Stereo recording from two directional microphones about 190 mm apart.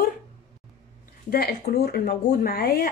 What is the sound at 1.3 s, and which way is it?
Speech, 55° left (ahead or behind).